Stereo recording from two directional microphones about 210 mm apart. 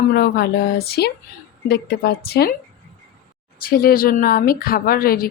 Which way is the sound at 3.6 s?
45° left (ahead or behind).